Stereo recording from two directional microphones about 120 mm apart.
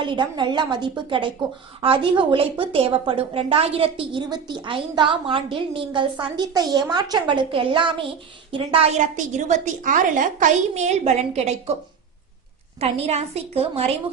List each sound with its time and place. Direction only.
0.0 s a child's voice: 40° right (ahead or behind)
9.0 s a woman's voice: 85° right; by 11.7 s 65° right (ahead or behind)
12.8 s a woman's voice: 60° right (ahead or behind)